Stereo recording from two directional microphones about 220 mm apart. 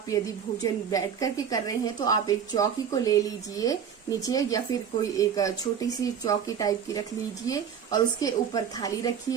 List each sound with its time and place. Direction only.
0.6 s speech: 15° left (ahead or behind)